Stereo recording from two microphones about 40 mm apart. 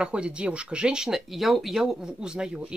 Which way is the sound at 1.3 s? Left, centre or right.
Centre.